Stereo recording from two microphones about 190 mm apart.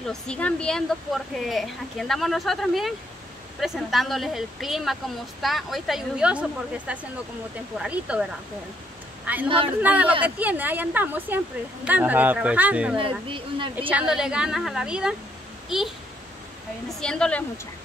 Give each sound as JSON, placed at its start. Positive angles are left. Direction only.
{"t": 0.1, "sound": "a man's voice", "side_deg": 5}
{"t": 12.9, "sound": "speech", "side_deg": -25}
{"t": 13.7, "sound": "speech", "side_deg": -5}
{"t": 17.0, "sound": "speech", "side_deg": 5}